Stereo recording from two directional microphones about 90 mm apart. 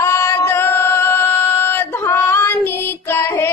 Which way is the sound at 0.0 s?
30° left (ahead or behind).